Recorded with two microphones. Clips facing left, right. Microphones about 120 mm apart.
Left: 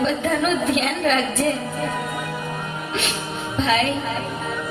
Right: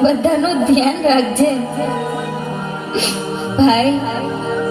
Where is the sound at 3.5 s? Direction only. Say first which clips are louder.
Right 9 dB; 30° right (ahead or behind).